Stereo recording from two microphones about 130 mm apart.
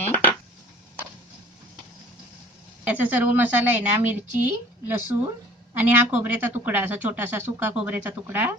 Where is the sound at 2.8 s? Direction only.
10° right (ahead or behind).